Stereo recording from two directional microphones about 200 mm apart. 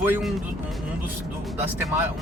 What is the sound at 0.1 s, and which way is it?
Speech, centre (ahead or behind).